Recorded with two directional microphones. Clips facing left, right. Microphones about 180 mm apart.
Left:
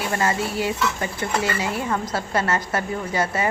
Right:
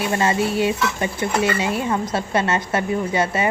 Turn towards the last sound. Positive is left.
turn(degrees=-20)  # may be behind; listen again after turning